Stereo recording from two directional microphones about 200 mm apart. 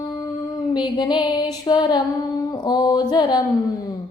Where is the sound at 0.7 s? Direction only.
20° left (ahead or behind).